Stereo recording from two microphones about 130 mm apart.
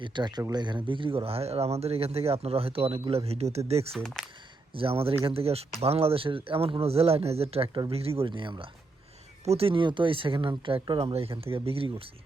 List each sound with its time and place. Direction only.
0.0 s speech: 35° right (ahead or behind); by 3.8 s 55° right (ahead or behind)
3.9 s speech: 5° left (ahead or behind)
4.7 s speech: 45° right (ahead or behind)
9.4 s speech: 50° right (ahead or behind)